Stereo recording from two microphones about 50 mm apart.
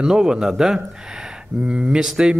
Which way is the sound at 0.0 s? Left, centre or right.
Centre.